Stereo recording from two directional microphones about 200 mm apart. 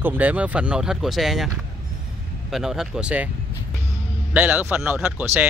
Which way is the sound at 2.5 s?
Centre (ahead or behind).